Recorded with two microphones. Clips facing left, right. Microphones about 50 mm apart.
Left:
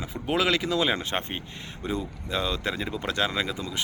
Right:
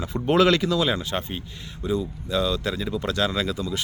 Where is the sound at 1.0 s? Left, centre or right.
Left.